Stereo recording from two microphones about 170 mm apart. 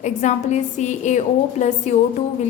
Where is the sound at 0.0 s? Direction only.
45° left (ahead or behind).